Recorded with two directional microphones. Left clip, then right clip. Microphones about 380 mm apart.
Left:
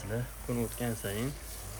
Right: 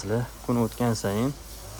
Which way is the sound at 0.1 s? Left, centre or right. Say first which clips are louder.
Right 9 dB; right.